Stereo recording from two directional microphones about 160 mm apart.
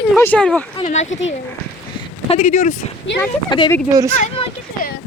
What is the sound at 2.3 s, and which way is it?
Speech, 45° left (ahead or behind).